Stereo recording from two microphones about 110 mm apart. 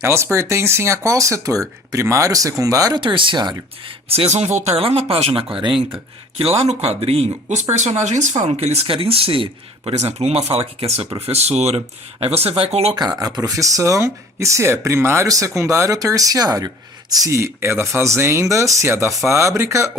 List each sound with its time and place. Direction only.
0.0 s speech: 25° right (ahead or behind); by 3.9 s 40° right (ahead or behind)
4.1 s speech: 65° right (ahead or behind); by 6.0 s 50° right (ahead or behind)
6.4 s speech: 65° right (ahead or behind)
13.0 s speech: 35° right (ahead or behind)